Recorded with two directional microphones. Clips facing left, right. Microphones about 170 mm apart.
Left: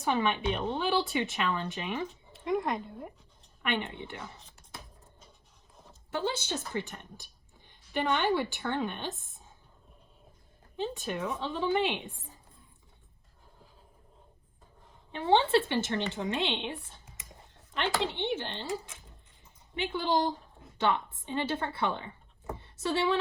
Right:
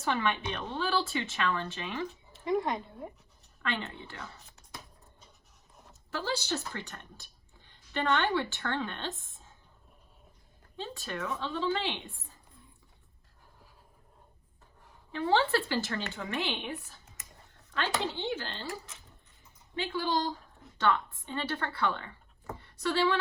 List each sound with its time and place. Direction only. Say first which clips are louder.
0.0 s speech: left 2 dB; 20° left (ahead or behind)
2.0 s speech: even; centre (ahead or behind)
3.6 s speech: left 3 dB; 15° left (ahead or behind)
5.9 s speech: left 2 dB; 25° left (ahead or behind)
10.8 s speech: left 4 dB; 20° left (ahead or behind)
15.1 s speech: left 2 dB; 25° left (ahead or behind)
18.0 s speech: left 2 dB; 20° left (ahead or behind)
19.7 s a woman's voice: left 2 dB; 20° left (ahead or behind)